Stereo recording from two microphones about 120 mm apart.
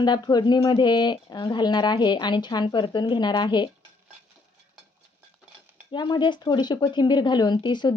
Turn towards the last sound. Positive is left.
turn(degrees=40)  # may be behind; listen again after turning